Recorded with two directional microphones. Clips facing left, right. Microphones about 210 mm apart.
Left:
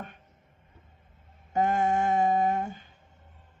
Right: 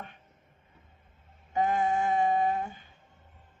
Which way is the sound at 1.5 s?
45° left (ahead or behind).